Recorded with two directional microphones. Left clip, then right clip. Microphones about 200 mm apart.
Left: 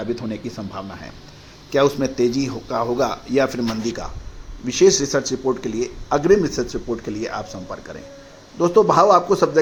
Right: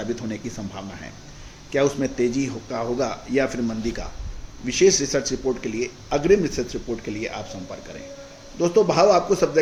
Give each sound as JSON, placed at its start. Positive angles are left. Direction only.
{"t": 0.2, "sound": "speech", "side_deg": 5}